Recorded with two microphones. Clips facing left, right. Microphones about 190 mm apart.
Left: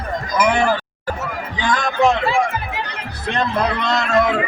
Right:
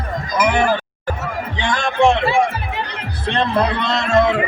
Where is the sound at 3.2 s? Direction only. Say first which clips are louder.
Right 2 dB; 30° right (ahead or behind).